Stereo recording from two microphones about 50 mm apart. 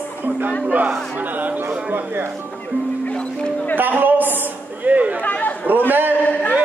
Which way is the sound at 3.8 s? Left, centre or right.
Right.